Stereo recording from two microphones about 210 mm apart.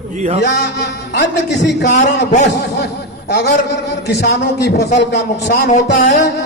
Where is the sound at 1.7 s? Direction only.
55° left (ahead or behind).